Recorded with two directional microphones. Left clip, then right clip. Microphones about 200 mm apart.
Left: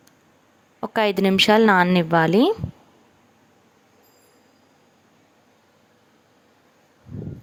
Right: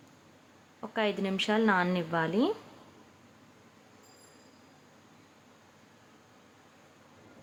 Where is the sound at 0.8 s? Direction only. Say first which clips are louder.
Left 11 dB; 45° left (ahead or behind).